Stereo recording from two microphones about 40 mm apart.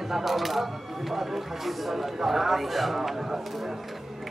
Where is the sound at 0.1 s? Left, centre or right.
Centre.